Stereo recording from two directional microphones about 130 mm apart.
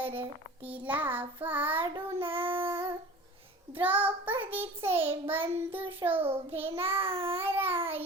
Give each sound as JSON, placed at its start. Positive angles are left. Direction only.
{"t": 0.6, "sound": "child singing", "side_deg": -10}
{"t": 1.8, "sound": "child singing", "side_deg": -40}
{"t": 3.8, "sound": "child singing", "side_deg": -15}
{"t": 6.2, "sound": "child singing", "side_deg": -50}
{"t": 7.4, "sound": "child singing", "side_deg": -15}
{"t": 7.8, "sound": "babbling", "side_deg": -45}